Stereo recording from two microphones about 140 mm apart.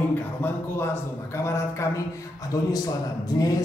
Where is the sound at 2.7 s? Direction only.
25° left (ahead or behind).